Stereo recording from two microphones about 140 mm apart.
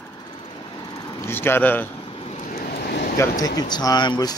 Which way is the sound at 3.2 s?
25° left (ahead or behind).